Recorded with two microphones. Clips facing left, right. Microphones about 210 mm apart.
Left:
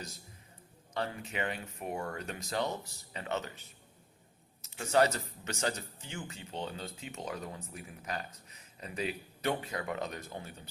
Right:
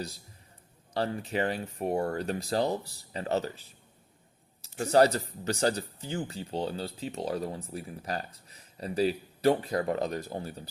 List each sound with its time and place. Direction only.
0.9 s speech: 35° right (ahead or behind)